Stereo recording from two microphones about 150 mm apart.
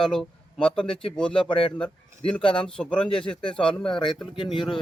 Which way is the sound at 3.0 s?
35° left (ahead or behind).